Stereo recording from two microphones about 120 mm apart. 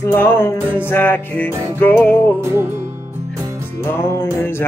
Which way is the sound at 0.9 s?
20° left (ahead or behind).